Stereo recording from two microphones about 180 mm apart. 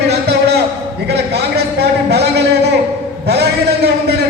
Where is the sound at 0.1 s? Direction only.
65° right (ahead or behind).